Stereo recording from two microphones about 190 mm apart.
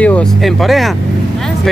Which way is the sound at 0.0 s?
5° left (ahead or behind).